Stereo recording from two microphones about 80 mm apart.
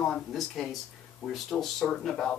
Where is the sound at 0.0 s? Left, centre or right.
Centre.